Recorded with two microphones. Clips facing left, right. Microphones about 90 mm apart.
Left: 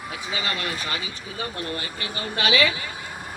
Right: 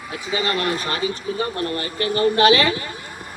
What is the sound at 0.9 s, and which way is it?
A man's voice, 40° right (ahead or behind).